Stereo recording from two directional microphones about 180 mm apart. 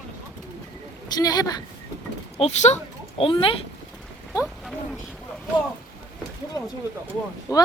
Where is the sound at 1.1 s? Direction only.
20° left (ahead or behind).